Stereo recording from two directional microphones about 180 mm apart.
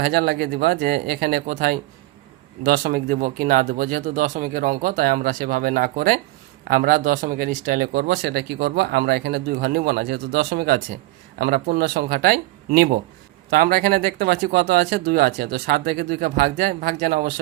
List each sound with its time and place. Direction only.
0.0 s speech: 55° right (ahead or behind)